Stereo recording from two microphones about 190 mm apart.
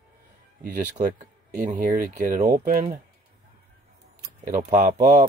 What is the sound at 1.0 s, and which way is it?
Speech, 40° right (ahead or behind).